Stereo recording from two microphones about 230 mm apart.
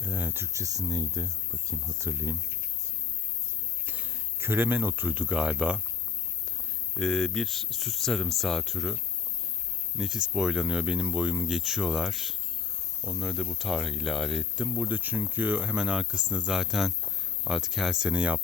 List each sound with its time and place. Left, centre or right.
0.0 s speech: centre
3.8 s speech: centre
6.9 s speech: centre
10.0 s speech: centre